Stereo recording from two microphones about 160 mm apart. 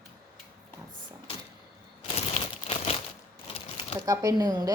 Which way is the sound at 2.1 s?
40° left (ahead or behind).